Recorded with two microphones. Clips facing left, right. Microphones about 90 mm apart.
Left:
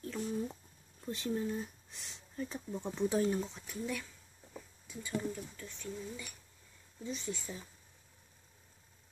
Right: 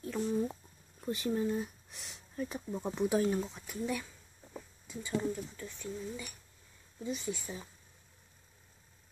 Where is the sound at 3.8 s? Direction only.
15° right (ahead or behind).